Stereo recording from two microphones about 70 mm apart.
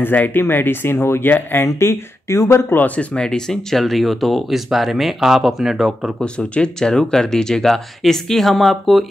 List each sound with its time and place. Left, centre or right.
0.0 s speech: left
3.0 s speech: centre
6.2 s speech: centre